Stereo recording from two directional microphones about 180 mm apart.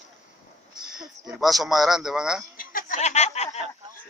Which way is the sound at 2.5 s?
50° left (ahead or behind).